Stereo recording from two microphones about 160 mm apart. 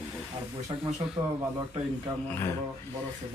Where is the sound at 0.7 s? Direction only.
30° right (ahead or behind).